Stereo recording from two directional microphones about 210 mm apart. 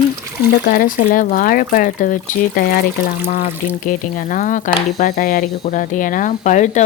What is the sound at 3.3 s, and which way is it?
Speech, 40° left (ahead or behind).